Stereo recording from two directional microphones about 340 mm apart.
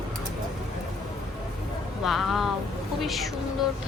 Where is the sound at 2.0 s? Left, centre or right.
Centre.